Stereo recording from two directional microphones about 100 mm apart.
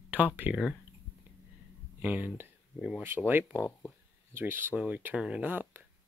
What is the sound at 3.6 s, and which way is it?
Speech, 20° left (ahead or behind).